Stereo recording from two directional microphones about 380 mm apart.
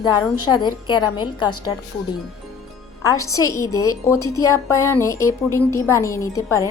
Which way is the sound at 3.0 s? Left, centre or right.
Centre.